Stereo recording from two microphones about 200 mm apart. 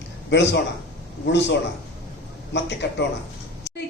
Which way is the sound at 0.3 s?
60° left (ahead or behind).